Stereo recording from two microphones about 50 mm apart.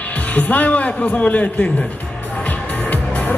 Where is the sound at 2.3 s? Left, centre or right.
Left.